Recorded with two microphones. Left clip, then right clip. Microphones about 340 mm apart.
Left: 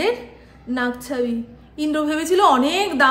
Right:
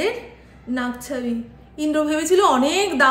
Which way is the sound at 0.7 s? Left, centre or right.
Centre.